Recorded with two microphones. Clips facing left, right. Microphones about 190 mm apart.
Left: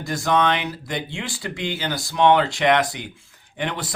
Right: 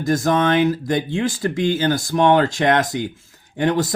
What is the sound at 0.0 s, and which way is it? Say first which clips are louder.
Speech: right 3 dB; 45° right (ahead or behind).